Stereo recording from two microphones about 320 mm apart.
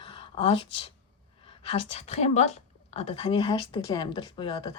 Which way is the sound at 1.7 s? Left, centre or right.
Centre.